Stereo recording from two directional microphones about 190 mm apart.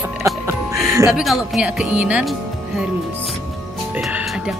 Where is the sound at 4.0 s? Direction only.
5° right (ahead or behind).